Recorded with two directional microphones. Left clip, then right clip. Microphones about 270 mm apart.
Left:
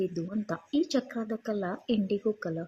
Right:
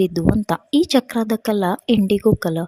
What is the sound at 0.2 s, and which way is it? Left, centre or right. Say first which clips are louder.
A woman's voice: right 15 dB; right.